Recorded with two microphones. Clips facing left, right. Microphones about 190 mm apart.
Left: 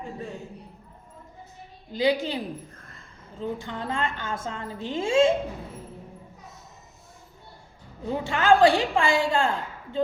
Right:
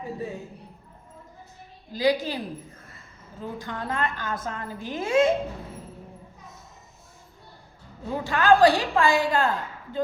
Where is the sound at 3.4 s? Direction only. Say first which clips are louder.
Left 2 dB; 25° left (ahead or behind).